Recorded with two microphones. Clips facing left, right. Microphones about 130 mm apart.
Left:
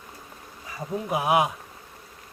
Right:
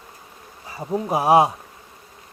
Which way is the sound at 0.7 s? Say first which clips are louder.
Right 5 dB; 30° right (ahead or behind).